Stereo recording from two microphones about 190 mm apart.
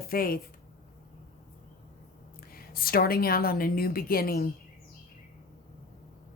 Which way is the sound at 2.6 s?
50° left (ahead or behind).